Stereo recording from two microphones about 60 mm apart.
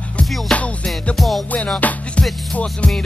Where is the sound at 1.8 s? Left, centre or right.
Left.